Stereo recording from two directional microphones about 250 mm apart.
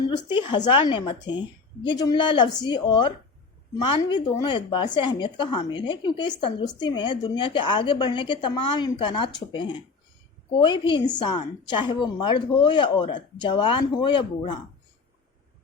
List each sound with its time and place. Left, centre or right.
0.3 s a woman's voice: centre